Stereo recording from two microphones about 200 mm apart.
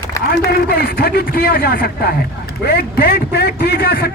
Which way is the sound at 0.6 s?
55° left (ahead or behind).